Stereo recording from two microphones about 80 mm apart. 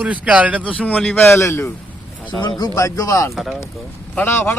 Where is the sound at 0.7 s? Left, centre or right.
Centre.